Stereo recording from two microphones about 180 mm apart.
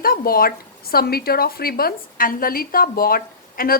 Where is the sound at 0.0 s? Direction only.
55° left (ahead or behind).